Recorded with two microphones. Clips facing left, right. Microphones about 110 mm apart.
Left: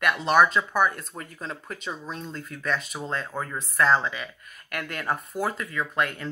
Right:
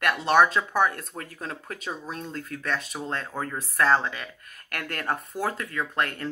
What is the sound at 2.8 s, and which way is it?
Speech, centre (ahead or behind).